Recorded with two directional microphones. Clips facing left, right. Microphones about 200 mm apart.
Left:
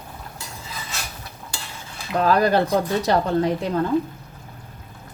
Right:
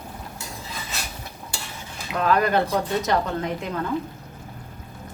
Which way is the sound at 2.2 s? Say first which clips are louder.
Left 2 dB; 35° left (ahead or behind).